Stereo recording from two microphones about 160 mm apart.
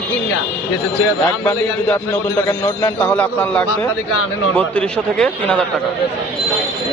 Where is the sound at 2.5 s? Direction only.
25° left (ahead or behind).